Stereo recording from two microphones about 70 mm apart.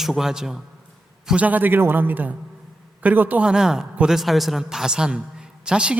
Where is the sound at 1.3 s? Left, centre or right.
Right.